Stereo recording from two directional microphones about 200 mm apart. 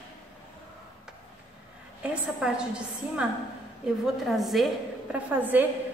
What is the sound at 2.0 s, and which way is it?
A woman's voice, 5° right (ahead or behind).